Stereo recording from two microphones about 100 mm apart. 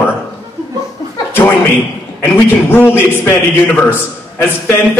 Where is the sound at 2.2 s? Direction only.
20° left (ahead or behind).